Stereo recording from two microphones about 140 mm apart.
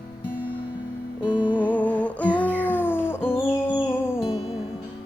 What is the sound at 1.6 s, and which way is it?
Music, 10° left (ahead or behind).